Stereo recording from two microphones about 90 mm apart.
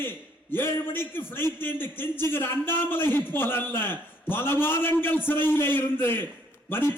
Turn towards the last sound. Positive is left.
turn(degrees=25)  # may be behind; listen again after turning